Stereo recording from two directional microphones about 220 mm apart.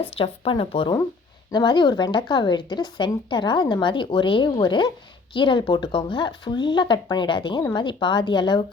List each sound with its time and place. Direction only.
0.2 s speech: 25° left (ahead or behind)